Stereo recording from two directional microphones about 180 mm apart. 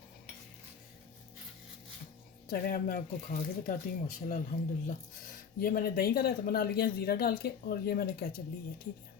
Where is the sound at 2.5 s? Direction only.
50° left (ahead or behind).